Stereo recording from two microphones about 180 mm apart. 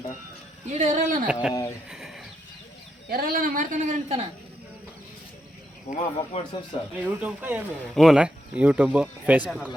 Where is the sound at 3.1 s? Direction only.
55° right (ahead or behind); by 4.3 s 40° right (ahead or behind).